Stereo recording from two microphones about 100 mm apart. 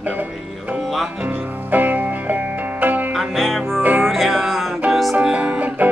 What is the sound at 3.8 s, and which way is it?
Music, 20° right (ahead or behind).